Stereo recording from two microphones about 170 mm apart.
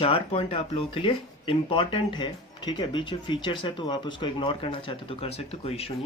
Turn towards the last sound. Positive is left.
turn(degrees=35)  # may be behind; listen again after turning